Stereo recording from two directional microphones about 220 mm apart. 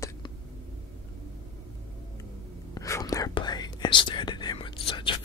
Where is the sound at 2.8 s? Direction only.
15° left (ahead or behind).